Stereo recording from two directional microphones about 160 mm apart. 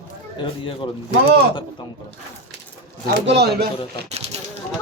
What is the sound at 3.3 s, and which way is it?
Speech, 90° right.